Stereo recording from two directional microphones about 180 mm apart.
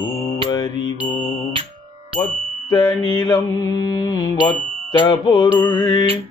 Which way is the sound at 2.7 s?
25° left (ahead or behind).